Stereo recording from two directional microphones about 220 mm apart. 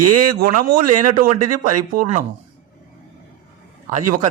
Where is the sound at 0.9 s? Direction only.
90° right.